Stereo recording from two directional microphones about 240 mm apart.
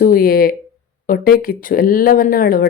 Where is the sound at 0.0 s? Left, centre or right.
Left.